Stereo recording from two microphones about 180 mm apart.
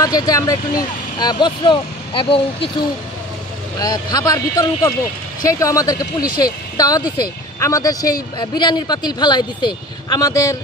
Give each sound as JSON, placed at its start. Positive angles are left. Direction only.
{"t": 0.0, "sound": "speech", "side_deg": 20}
{"t": 3.8, "sound": "speech", "side_deg": 20}